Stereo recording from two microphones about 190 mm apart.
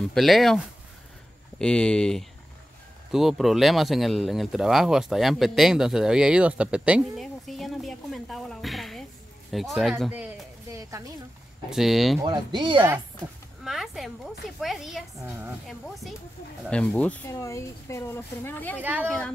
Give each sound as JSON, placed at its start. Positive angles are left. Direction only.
{"t": 0.0, "sound": "speech", "side_deg": 0}
{"t": 1.6, "sound": "speech", "side_deg": 5}
{"t": 9.5, "sound": "a sound", "side_deg": 0}
{"t": 10.8, "sound": "speech", "side_deg": -15}
{"t": 11.7, "sound": "speech", "side_deg": 0}
{"t": 12.2, "sound": "speech", "side_deg": -25}
{"t": 13.7, "sound": "speech", "side_deg": 0}
{"t": 16.6, "sound": "speech", "side_deg": 5}
{"t": 18.8, "sound": "speech", "side_deg": -10}
{"t": 19.0, "sound": "speech", "side_deg": 5}